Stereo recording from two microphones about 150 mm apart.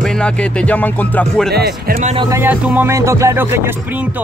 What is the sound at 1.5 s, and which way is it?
Speech, 90° right.